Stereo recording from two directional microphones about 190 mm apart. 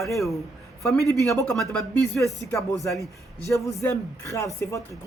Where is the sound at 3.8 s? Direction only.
15° left (ahead or behind).